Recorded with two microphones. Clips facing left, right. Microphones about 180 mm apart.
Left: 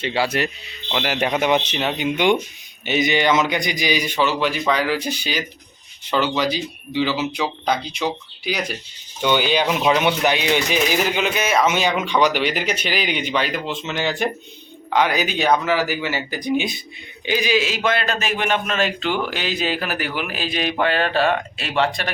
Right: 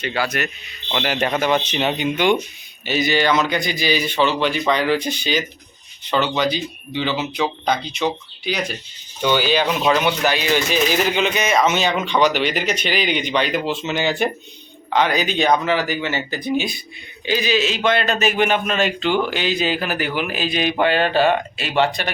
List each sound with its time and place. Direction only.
0.0 s speech: 25° left (ahead or behind)
0.9 s speech: 5° left (ahead or behind)
1.7 s a man's voice: centre (ahead or behind)
2.1 s a man's voice: 15° left (ahead or behind); by 14.3 s centre (ahead or behind)
14.9 s a man's voice: 10° left (ahead or behind)